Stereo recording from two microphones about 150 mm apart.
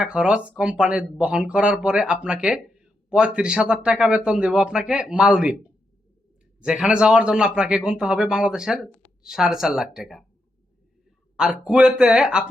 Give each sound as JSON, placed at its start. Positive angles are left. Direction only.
{"t": 0.0, "sound": "speech", "side_deg": -5}
{"t": 6.6, "sound": "a man's voice", "side_deg": -5}
{"t": 11.3, "sound": "a man's voice", "side_deg": -5}